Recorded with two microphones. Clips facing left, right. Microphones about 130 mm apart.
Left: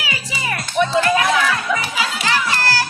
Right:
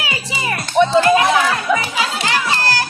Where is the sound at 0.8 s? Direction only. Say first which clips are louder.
Right 4 dB; 30° right (ahead or behind).